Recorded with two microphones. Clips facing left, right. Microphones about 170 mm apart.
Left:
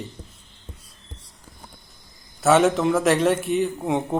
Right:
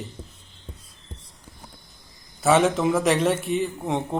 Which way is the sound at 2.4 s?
Centre (ahead or behind).